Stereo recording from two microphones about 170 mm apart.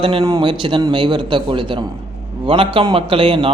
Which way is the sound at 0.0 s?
30° right (ahead or behind).